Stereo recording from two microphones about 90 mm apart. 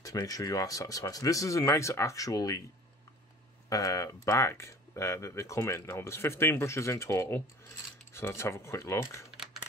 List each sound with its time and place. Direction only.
0.0 s speech: 40° left (ahead or behind)
3.6 s speech: 40° left (ahead or behind)